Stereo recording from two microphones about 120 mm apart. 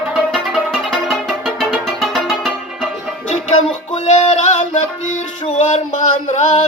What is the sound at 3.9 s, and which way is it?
Music, 60° left (ahead or behind).